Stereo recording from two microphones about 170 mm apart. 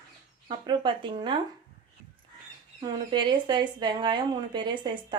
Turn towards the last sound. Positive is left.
turn(degrees=-25)  # may be behind; listen again after turning